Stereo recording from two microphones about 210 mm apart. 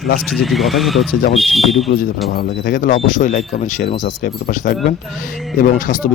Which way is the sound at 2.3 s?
50° left (ahead or behind).